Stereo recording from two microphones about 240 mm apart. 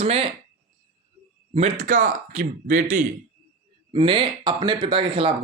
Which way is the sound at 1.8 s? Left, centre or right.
Right.